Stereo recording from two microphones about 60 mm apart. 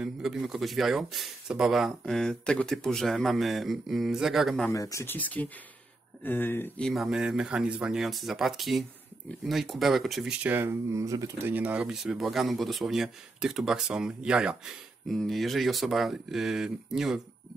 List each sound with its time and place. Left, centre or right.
0.0 s speech: centre
4.7 s speech: left
5.0 s speech: left
6.8 s speech: centre
7.1 s speech: centre
10.4 s speech: right
10.9 s speech: right
11.3 s speech: right
11.9 s speech: centre
15.0 s speech: centre